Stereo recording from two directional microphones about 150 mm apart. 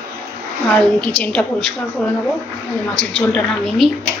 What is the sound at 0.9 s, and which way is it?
Speech, 10° left (ahead or behind).